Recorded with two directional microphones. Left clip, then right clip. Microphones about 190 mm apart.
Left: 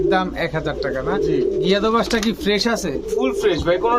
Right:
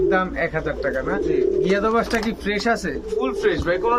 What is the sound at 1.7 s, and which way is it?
Speech, 20° left (ahead or behind).